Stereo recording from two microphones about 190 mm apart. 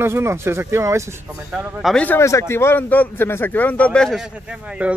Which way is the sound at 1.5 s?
5° right (ahead or behind).